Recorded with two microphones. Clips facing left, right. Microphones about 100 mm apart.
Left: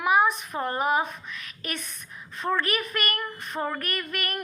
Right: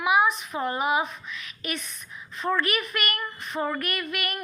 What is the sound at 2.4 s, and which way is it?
Speech, 40° left (ahead or behind).